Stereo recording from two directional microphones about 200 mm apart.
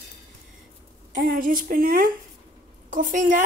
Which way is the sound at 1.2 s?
45° right (ahead or behind).